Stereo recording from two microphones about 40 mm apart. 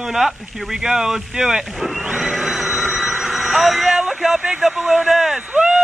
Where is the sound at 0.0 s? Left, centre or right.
Centre.